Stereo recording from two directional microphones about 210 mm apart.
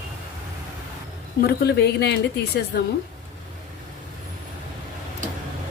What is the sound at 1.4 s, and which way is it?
Speech, 50° left (ahead or behind).